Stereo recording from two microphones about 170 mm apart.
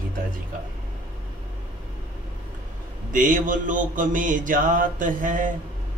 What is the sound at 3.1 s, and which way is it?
Mantra, 50° right (ahead or behind).